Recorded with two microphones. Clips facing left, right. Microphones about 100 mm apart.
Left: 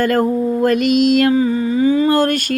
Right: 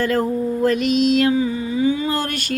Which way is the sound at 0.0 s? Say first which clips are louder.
Left 4 dB; 55° left (ahead or behind).